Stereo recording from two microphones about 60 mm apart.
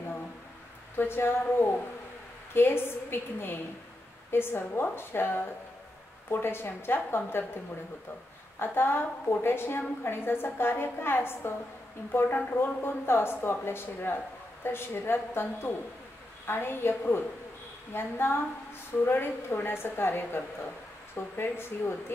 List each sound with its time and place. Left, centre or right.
0.9 s speech: left
2.5 s speech: left
8.5 s speech: left